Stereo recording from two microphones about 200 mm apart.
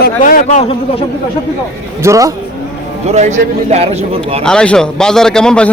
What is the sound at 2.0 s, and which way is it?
Speech, 15° right (ahead or behind).